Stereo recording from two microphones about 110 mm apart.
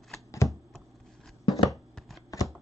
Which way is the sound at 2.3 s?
35° left (ahead or behind).